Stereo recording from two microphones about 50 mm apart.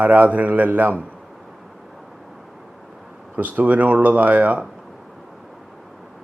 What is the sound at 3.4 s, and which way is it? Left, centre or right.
Speech, right.